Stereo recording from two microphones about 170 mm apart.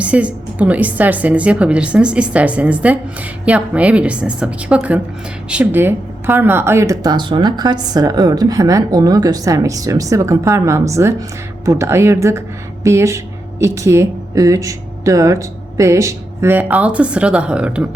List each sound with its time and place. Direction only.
0.0 s a woman's voice: 5° right (ahead or behind)